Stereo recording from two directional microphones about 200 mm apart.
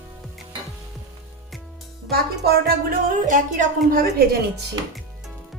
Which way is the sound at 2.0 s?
50° right (ahead or behind).